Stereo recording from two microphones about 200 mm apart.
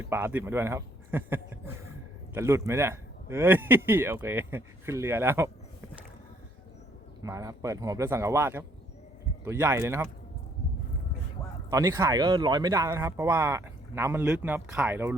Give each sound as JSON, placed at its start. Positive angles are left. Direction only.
{"t": 0.1, "sound": "speech", "side_deg": -10}
{"t": 7.2, "sound": "speech", "side_deg": -15}
{"t": 11.7, "sound": "speech", "side_deg": -15}